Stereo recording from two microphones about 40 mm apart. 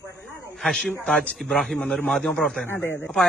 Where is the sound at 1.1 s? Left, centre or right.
Left.